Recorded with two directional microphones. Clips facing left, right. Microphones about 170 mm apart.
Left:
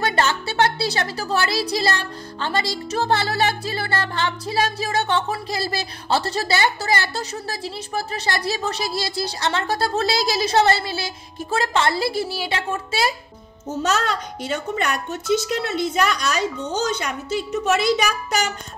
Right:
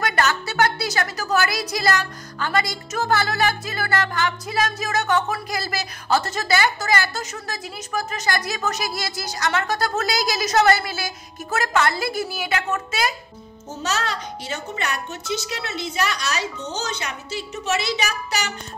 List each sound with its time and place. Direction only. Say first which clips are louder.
0.0 s a woman's voice: left 1 dB; 25° left (ahead or behind)
13.7 s a child's voice: left 4 dB; 55° left (ahead or behind)